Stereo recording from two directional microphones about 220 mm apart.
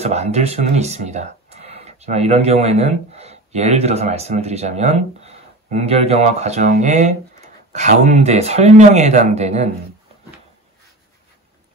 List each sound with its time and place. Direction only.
0.0 s speech: 30° right (ahead or behind)